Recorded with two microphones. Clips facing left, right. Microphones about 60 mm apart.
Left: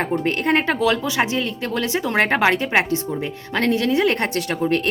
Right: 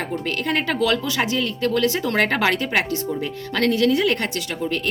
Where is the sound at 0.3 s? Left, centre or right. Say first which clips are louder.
Left 3 dB; left.